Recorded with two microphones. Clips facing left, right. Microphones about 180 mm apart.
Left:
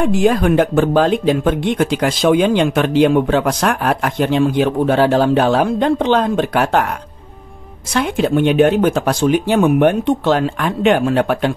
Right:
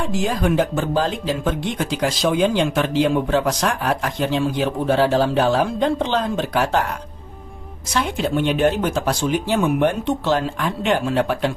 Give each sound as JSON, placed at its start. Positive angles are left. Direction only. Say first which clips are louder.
{"t": 0.0, "sound": "speech", "louder": "left 7 dB", "side_deg": 60}
{"t": 7.9, "sound": "speech", "louder": "left 5 dB", "side_deg": 55}